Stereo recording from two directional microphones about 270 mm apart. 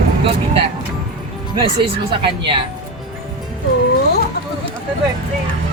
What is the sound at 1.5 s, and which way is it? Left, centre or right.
Speech, centre.